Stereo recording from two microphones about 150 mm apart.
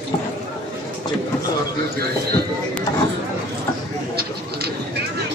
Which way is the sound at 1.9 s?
90° right.